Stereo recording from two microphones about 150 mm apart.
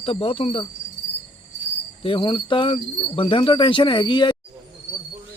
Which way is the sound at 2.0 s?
35° left (ahead or behind).